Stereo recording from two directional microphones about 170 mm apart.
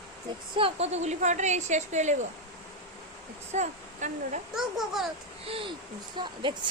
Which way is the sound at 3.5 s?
45° right (ahead or behind).